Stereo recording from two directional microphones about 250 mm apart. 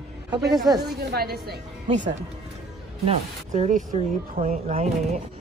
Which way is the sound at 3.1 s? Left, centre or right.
Right.